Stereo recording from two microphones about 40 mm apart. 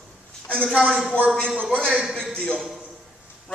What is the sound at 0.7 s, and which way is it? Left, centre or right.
A man's voice, centre.